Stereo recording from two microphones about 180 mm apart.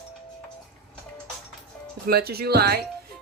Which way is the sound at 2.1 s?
60° right (ahead or behind).